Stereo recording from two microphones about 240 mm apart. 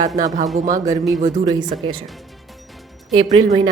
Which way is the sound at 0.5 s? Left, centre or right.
Right.